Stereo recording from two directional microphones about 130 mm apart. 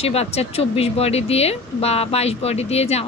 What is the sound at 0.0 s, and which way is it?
Speech, 50° left (ahead or behind).